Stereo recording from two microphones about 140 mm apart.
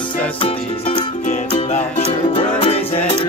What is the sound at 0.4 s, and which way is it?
Music, 40° left (ahead or behind).